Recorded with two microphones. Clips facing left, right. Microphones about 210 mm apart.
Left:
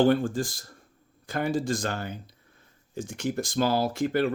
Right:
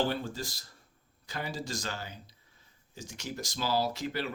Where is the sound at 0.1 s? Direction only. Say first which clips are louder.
Left 11 dB; 50° left (ahead or behind).